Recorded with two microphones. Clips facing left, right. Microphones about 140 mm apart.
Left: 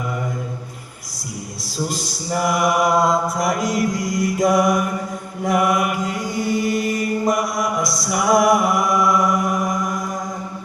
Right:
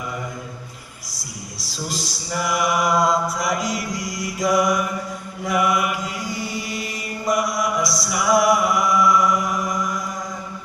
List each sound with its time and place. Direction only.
1.6 s mantra: 50° left (ahead or behind)